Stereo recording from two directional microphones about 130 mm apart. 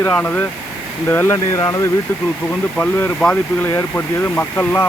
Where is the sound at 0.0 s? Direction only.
10° left (ahead or behind).